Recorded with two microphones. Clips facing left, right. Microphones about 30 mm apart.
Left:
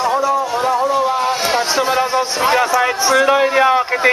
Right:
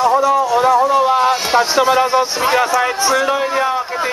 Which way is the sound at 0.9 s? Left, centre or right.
Centre.